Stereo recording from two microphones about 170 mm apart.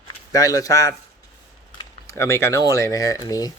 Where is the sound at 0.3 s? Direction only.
20° left (ahead or behind).